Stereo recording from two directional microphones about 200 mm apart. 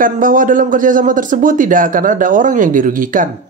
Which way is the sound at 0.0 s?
40° right (ahead or behind).